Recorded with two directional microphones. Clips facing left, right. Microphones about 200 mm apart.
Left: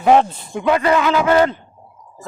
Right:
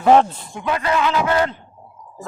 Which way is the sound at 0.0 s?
10° left (ahead or behind).